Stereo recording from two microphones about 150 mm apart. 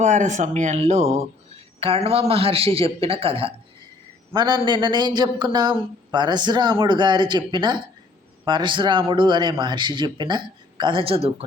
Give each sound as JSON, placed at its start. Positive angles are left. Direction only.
{"t": 0.0, "sound": "a man's voice", "side_deg": -55}